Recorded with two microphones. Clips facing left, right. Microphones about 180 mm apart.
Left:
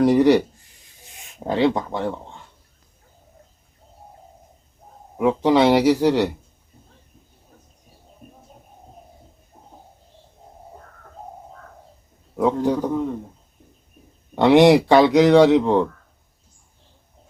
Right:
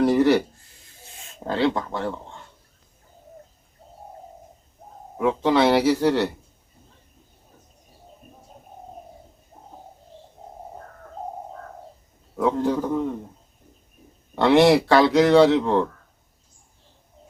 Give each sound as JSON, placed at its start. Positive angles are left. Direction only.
{"t": 0.0, "sound": "speech", "side_deg": 15}
{"t": 5.1, "sound": "speech", "side_deg": 15}
{"t": 12.4, "sound": "speech", "side_deg": 15}
{"t": 14.3, "sound": "speech", "side_deg": 15}